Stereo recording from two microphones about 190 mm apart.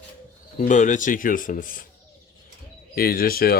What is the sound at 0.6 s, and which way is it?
Speech, 40° left (ahead or behind).